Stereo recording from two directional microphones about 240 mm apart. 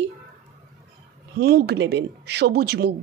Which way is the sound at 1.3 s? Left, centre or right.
Right.